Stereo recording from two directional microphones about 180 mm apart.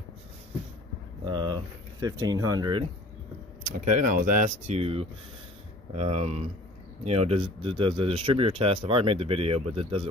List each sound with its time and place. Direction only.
1.2 s speech: 25° right (ahead or behind)
3.6 s speech: 45° right (ahead or behind)